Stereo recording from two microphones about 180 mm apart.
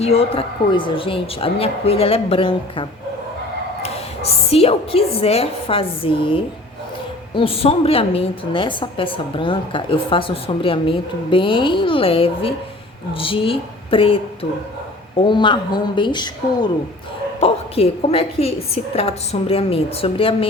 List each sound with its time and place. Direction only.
0.0 s a woman's voice: 35° left (ahead or behind)
4.5 s a woman's voice: 35° left (ahead or behind)
15.2 s a woman's voice: 25° left (ahead or behind)